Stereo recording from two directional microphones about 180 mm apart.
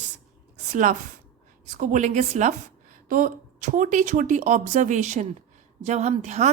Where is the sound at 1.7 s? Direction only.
45° right (ahead or behind).